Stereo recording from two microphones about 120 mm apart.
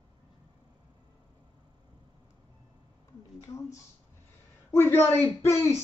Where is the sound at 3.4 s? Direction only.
25° left (ahead or behind).